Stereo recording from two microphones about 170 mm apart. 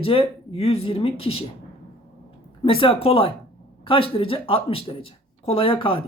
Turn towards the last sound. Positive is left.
turn(degrees=30)  # may be behind; listen again after turning